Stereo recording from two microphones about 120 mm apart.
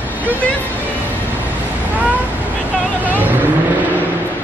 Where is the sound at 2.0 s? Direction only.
15° right (ahead or behind).